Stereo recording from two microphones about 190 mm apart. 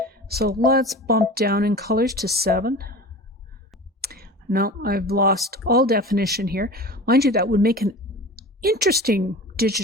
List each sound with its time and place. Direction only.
0.0 s a sound: 55° right (ahead or behind)
0.6 s speech: 55° right (ahead or behind)
4.0 s speech: 55° right (ahead or behind)